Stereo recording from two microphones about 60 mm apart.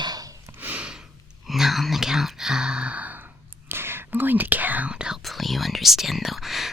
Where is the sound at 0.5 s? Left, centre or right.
Right.